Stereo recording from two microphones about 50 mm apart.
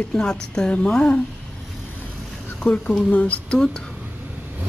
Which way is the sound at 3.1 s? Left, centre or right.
Left.